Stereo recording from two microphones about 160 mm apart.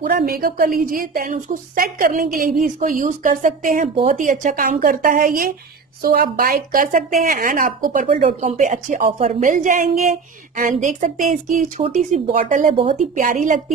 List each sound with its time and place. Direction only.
0.0 s a woman's voice: 65° right (ahead or behind)
8.1 s a woman's voice: 40° right (ahead or behind)